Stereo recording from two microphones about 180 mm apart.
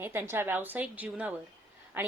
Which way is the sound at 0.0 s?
10° right (ahead or behind).